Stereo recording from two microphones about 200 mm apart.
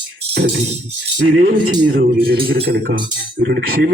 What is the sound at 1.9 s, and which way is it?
A man's voice, 45° right (ahead or behind).